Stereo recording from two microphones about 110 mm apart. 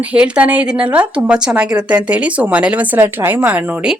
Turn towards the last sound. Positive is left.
turn(degrees=-10)  # may be behind; listen again after turning